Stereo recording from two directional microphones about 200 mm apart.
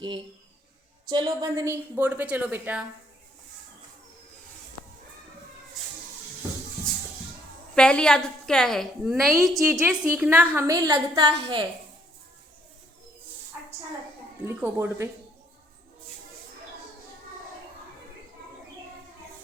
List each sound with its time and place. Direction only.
1.0 s a woman's voice: 20° right (ahead or behind)
7.8 s a woman's voice: 5° left (ahead or behind); by 11.3 s 15° right (ahead or behind)
11.3 s a woman's voice: 25° right (ahead or behind)
14.4 s a woman's voice: 10° right (ahead or behind)